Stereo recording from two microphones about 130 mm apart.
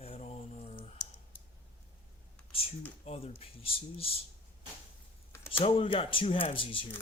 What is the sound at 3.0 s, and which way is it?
Speech, 50° left (ahead or behind).